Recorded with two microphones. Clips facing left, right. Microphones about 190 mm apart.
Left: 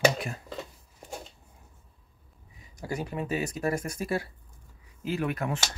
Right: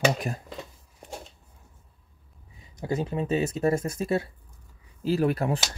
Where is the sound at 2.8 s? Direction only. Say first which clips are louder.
Right 5 dB; 25° right (ahead or behind).